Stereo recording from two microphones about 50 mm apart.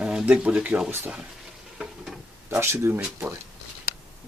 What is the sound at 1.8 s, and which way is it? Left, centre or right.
Stir, right.